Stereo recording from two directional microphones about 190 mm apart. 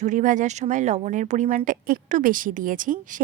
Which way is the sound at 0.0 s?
40° right (ahead or behind).